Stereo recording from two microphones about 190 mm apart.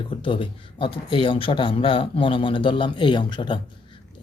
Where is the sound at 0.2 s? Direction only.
25° left (ahead or behind).